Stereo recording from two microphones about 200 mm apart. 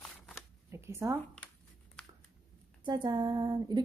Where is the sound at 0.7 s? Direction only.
15° right (ahead or behind).